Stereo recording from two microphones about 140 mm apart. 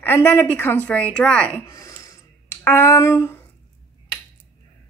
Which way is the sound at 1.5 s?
20° left (ahead or behind).